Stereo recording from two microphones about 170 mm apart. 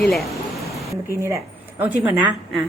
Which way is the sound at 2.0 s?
10° right (ahead or behind).